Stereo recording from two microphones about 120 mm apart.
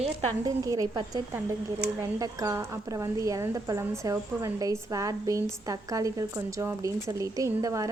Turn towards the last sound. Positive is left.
turn(degrees=-25)  # may be behind; listen again after turning